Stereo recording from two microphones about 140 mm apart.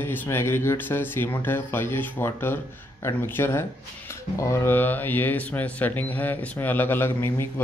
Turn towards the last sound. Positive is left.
turn(degrees=15)  # may be behind; listen again after turning